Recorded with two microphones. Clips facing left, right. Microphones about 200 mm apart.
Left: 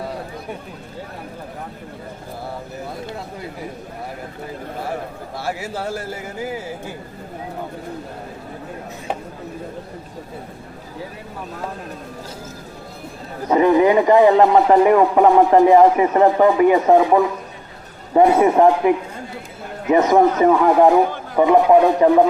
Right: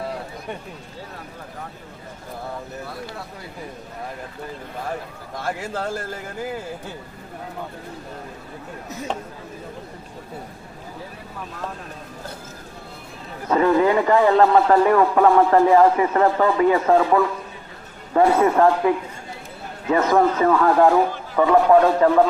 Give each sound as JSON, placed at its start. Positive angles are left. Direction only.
{"t": 5.4, "sound": "speech", "side_deg": 10}
{"t": 13.5, "sound": "speech", "side_deg": 15}